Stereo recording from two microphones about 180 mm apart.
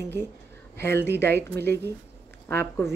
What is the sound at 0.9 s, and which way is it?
Speech, 65° right (ahead or behind).